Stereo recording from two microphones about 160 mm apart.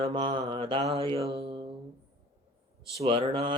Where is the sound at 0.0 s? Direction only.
35° right (ahead or behind).